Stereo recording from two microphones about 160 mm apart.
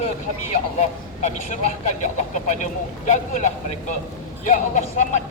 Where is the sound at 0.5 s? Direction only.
50° left (ahead or behind).